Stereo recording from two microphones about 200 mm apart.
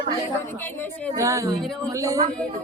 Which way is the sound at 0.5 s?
10° left (ahead or behind).